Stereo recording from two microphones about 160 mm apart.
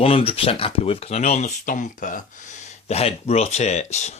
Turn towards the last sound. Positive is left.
turn(degrees=45)  # may be behind; listen again after turning